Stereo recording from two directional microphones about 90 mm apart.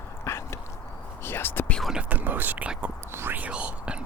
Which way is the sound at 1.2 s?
25° left (ahead or behind).